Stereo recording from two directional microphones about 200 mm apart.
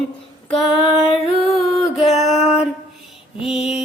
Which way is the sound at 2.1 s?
30° left (ahead or behind).